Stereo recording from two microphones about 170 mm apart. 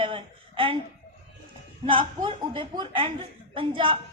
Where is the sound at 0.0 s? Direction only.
30° right (ahead or behind).